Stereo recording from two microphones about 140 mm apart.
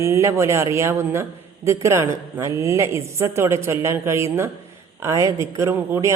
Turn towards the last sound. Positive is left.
turn(degrees=-20)  # may be behind; listen again after turning